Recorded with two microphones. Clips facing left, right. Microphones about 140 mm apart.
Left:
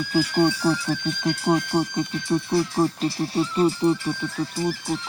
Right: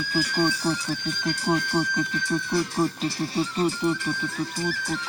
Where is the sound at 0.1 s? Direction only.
40° left (ahead or behind).